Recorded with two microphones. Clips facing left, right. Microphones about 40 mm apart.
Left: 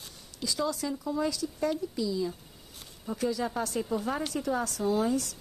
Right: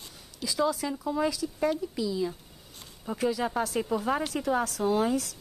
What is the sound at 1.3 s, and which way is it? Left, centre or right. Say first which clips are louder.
Speech: right 2 dB; centre.